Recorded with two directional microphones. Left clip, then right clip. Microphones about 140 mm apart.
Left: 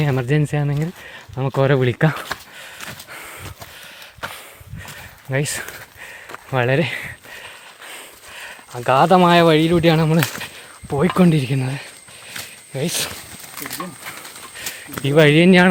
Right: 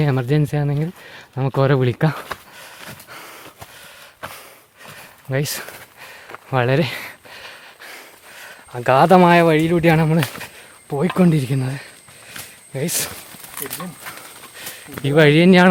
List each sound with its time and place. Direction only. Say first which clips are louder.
0.0 s speech: even; 25° right (ahead or behind)
1.0 s speech: even; 30° right (ahead or behind); by 2.2 s 15° right (ahead or behind)
3.1 s a sound: left 2 dB; 15° right (ahead or behind)
5.3 s a sound: left 1 dB; 15° right (ahead or behind)
6.5 s a sound: even; 30° right (ahead or behind)
7.9 s a sound: left 3 dB; 15° right (ahead or behind)
8.7 s speech: right 1 dB; 40° right (ahead or behind)
9.5 s speech: left 1 dB; 5° right (ahead or behind)
9.8 s speech: even; 25° right (ahead or behind)
10.8 s speech: left 2 dB; 5° left (ahead or behind)
11.1 s speech: left 1 dB; 10° right (ahead or behind)
15.0 s speech: even; 20° right (ahead or behind)